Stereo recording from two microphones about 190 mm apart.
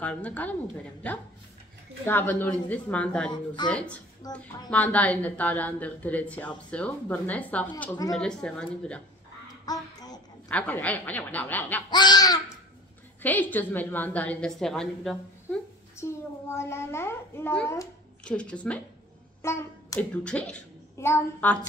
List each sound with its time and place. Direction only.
0.0 s a woman's voice: 10° left (ahead or behind)
9.7 s a sound: 20° left (ahead or behind)
10.5 s a woman's voice: 10° left (ahead or behind)
11.9 s speech: 20° left (ahead or behind)
13.2 s a woman's voice: 10° left (ahead or behind)
16.0 s a woman's voice: 15° left (ahead or behind)